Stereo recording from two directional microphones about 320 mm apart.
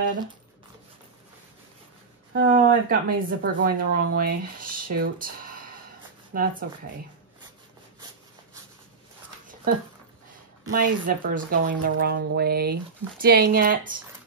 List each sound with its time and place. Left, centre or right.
2.3 s speech: right
6.3 s speech: right
10.7 s speech: right